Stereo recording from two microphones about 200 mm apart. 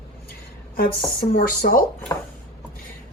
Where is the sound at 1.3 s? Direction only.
50° left (ahead or behind).